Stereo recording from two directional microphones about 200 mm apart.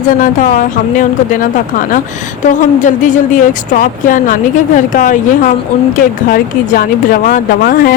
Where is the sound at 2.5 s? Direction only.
40° left (ahead or behind).